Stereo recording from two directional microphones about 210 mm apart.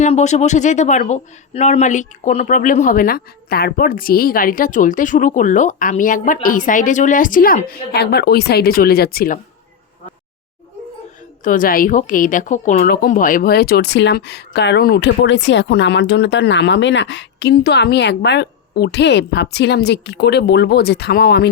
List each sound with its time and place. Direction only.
0.0 s speech: 35° left (ahead or behind)
11.4 s speech: 40° left (ahead or behind)